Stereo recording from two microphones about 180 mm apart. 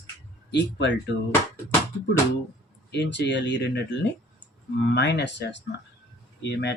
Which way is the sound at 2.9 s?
75° left (ahead or behind).